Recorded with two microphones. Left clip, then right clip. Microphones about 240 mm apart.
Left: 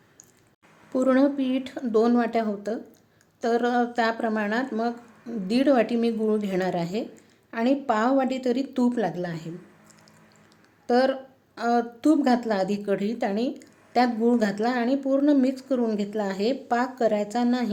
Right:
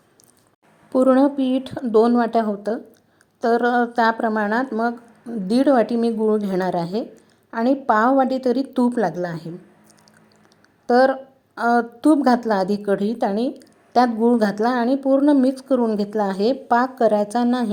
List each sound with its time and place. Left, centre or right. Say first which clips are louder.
0.9 s a woman's voice: right 6 dB; centre
10.8 s a woman's voice: right 6 dB; centre